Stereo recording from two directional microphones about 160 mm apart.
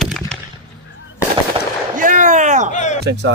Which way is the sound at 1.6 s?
35° right (ahead or behind).